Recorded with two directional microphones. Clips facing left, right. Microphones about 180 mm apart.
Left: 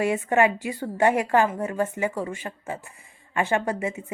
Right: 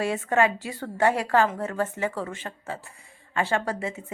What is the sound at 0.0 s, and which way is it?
Speech, 15° left (ahead or behind).